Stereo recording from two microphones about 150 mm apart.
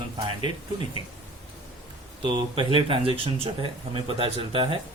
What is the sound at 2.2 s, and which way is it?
Speech, 35° right (ahead or behind).